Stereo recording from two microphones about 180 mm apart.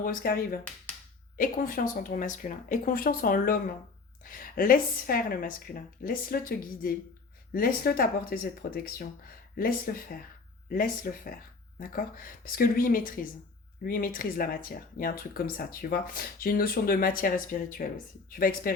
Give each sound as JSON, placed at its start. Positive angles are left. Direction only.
{"t": 0.0, "sound": "speech", "side_deg": 50}